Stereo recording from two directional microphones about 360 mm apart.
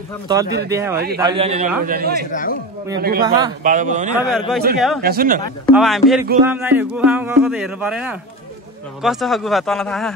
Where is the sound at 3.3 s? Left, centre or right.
Centre.